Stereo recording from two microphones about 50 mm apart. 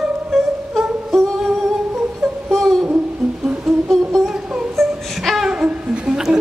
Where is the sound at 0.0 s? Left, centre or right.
Centre.